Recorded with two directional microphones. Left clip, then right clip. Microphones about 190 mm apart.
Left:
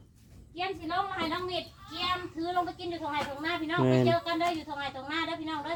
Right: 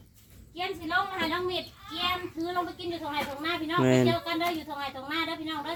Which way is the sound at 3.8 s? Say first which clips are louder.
Right 3 dB; 10° left (ahead or behind).